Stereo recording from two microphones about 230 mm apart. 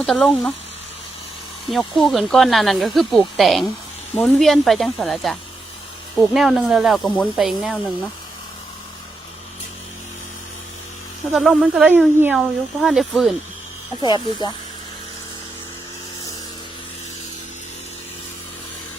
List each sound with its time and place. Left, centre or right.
0.0 s speech: centre
1.7 s speech: centre
11.3 s speech: centre
14.0 s speech: centre